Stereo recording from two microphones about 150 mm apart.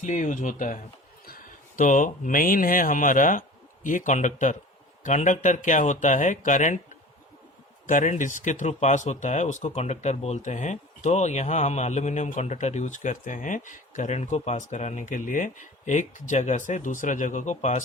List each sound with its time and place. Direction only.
0.0 s speech: 55° left (ahead or behind)
1.2 s speech: 70° left (ahead or behind); by 6.7 s 55° left (ahead or behind)
7.9 s speech: 60° left (ahead or behind)